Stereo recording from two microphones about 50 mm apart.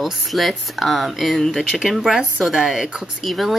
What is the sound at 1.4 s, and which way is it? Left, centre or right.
Speech, centre.